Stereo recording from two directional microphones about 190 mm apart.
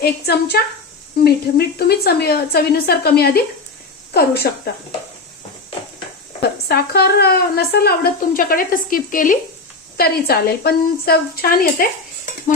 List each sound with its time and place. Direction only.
0.0 s speech: 60° left (ahead or behind)
6.7 s a woman's voice: 55° left (ahead or behind)